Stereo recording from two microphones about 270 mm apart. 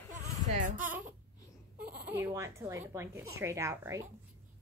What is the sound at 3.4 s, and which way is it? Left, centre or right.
Speech, centre.